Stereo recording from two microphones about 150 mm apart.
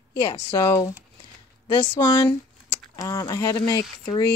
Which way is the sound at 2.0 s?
25° left (ahead or behind).